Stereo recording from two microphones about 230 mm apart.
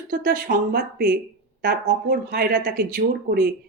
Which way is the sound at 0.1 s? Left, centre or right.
Right.